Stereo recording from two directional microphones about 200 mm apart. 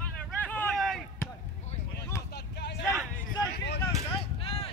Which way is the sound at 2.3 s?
55° left (ahead or behind).